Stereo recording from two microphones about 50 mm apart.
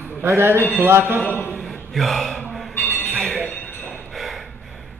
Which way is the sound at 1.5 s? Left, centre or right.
Centre.